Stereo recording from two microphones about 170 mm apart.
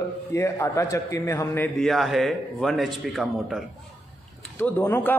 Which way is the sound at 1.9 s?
Centre (ahead or behind).